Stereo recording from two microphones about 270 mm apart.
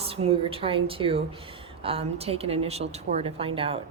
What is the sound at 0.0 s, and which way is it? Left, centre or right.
A woman's voice, right.